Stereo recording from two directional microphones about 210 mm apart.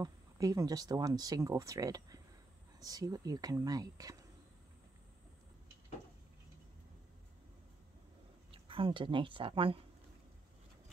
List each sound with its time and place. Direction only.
0.0 s speech: 15° right (ahead or behind)
8.5 s speech: 25° right (ahead or behind)